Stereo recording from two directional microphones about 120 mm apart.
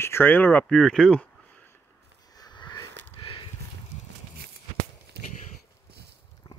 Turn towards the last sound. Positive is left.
turn(degrees=35)  # may be behind; listen again after turning